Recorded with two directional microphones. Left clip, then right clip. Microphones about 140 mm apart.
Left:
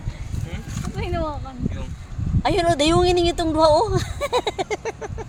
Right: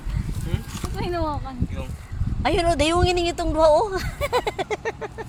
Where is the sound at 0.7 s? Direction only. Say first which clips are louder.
Even; 90° right.